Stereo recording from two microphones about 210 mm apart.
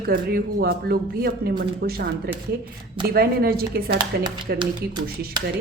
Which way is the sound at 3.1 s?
45° right (ahead or behind).